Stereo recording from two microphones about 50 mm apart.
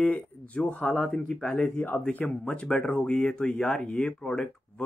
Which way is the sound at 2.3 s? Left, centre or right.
Left.